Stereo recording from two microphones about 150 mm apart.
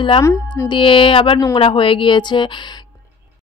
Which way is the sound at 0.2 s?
15° left (ahead or behind).